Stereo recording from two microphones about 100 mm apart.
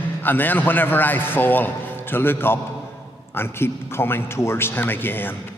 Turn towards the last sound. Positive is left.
turn(degrees=20)  # may be behind; listen again after turning